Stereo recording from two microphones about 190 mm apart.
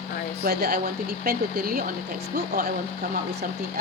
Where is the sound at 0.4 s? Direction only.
50° right (ahead or behind).